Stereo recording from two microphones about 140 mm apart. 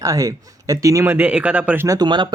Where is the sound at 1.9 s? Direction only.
30° right (ahead or behind).